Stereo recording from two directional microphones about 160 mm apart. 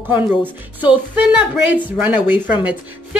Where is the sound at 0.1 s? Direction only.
10° right (ahead or behind).